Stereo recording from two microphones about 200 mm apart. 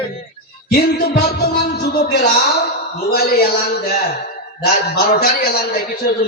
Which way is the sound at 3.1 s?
50° left (ahead or behind).